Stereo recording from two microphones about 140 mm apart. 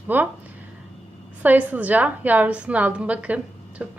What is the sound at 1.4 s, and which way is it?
A woman's voice, 10° right (ahead or behind).